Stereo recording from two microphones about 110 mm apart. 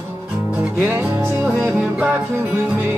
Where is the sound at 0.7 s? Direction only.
15° right (ahead or behind).